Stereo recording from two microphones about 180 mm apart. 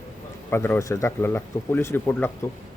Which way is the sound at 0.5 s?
15° left (ahead or behind).